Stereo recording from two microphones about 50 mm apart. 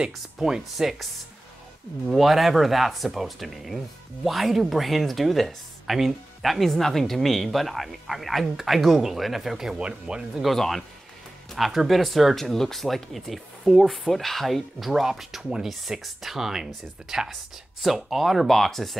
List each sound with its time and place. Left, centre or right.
0.0 s speech: centre
2.0 s speech: centre
9.8 s speech: centre
10.3 s speech: centre
11.5 s speech: centre